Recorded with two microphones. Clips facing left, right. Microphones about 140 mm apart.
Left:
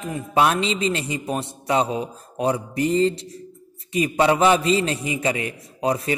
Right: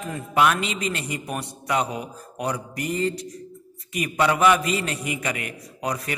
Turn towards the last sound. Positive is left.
turn(degrees=25)  # may be behind; listen again after turning